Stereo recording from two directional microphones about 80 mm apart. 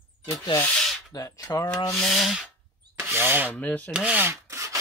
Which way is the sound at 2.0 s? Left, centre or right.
Centre.